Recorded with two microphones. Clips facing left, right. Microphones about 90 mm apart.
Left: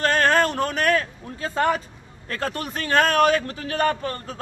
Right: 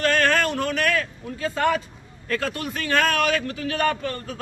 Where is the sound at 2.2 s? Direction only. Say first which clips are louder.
Right 1 dB; 35° left (ahead or behind).